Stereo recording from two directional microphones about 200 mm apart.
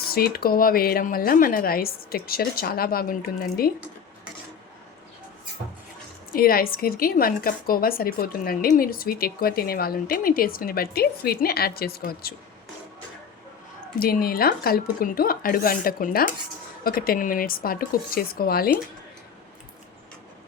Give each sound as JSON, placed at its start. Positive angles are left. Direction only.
{"t": 0.1, "sound": "a woman's voice", "side_deg": 50}
{"t": 6.3, "sound": "a woman's voice", "side_deg": 45}
{"t": 14.0, "sound": "a woman's voice", "side_deg": 45}